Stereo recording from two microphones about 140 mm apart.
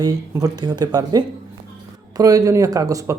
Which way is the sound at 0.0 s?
25° right (ahead or behind).